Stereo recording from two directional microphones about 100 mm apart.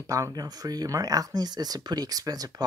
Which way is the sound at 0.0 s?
35° right (ahead or behind).